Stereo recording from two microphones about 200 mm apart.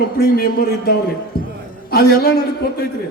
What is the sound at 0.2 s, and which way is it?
A man's voice, 55° left (ahead or behind).